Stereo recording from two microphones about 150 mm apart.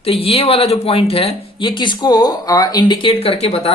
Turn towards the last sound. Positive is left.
turn(degrees=40)  # may be behind; listen again after turning